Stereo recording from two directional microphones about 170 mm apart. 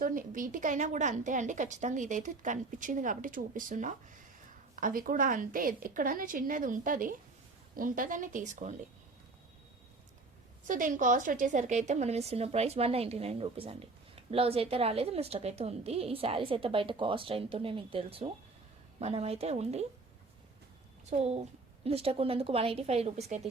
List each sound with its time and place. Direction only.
0.0 s a woman's voice: 50° right (ahead or behind)
10.7 s speech: 50° right (ahead or behind)
21.1 s speech: 40° right (ahead or behind)